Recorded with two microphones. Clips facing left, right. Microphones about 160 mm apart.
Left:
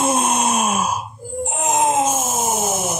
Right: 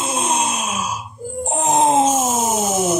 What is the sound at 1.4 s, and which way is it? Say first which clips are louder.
Wail: right 2 dB; 35° right (ahead or behind).